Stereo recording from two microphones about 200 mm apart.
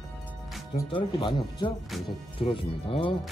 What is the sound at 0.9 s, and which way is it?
Speech, 25° left (ahead or behind).